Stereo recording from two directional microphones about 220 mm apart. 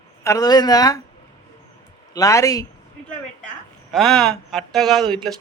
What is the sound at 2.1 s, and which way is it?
Speech, 15° left (ahead or behind).